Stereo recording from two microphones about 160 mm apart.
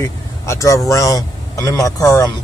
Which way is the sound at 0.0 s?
20° left (ahead or behind).